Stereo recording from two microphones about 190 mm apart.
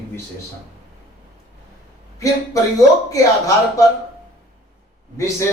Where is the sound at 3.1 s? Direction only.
20° left (ahead or behind).